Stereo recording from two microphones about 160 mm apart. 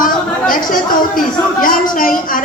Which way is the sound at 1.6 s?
60° left (ahead or behind).